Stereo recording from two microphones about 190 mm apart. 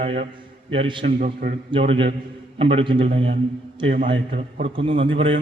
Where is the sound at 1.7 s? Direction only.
30° right (ahead or behind).